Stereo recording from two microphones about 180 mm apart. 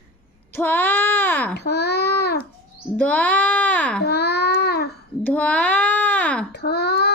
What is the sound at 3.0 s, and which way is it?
Music, 5° left (ahead or behind).